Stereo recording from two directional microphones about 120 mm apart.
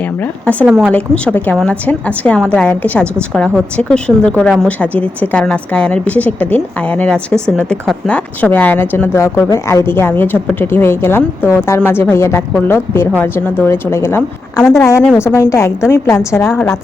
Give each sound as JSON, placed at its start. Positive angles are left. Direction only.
{"t": 0.6, "sound": "speech", "side_deg": -10}
{"t": 0.9, "sound": "a woman's voice", "side_deg": 10}